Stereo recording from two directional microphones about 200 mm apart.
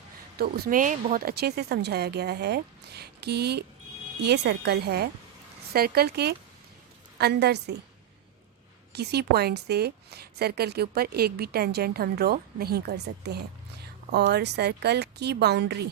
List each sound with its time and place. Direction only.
0.3 s a woman's voice: 50° right (ahead or behind)
8.9 s a woman's voice: 55° right (ahead or behind)